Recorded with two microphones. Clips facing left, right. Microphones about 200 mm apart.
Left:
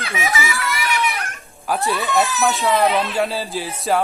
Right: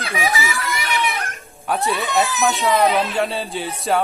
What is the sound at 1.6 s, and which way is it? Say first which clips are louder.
Speech: even; centre (ahead or behind).